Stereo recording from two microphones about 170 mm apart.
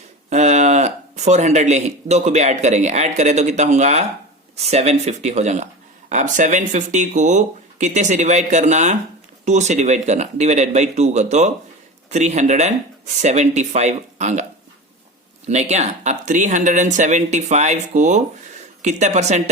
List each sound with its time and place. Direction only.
0.3 s speech: 40° right (ahead or behind)
15.4 s speech: 40° right (ahead or behind)